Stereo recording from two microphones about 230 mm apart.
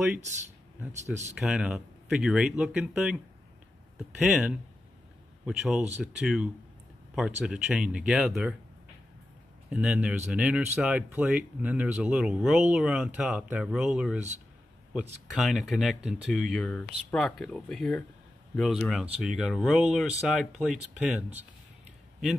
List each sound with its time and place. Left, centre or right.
1.4 s speech: centre
4.2 s a man's voice: centre
9.7 s speech: centre